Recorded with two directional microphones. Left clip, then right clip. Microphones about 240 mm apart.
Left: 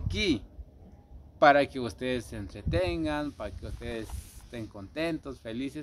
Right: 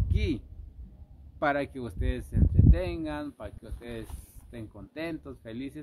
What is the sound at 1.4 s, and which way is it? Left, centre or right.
Speech, centre.